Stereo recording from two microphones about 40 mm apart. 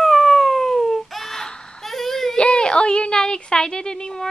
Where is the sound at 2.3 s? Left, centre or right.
Left.